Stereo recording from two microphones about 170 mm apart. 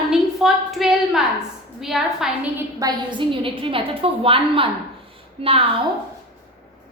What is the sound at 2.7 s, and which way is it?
A woman's voice, 25° right (ahead or behind).